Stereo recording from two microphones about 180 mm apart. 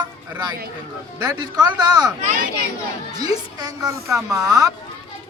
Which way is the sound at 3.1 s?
20° right (ahead or behind).